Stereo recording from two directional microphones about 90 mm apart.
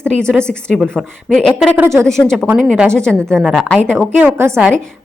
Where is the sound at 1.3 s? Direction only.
5° left (ahead or behind).